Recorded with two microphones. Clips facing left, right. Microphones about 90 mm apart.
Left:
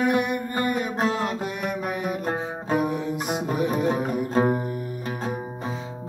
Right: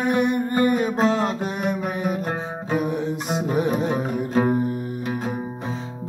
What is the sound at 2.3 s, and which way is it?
Music, 20° left (ahead or behind).